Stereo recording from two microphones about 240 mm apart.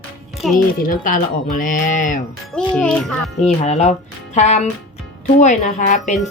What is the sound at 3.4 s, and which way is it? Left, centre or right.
Speech, left.